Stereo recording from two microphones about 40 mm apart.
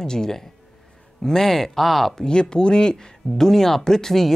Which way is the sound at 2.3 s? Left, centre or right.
Left.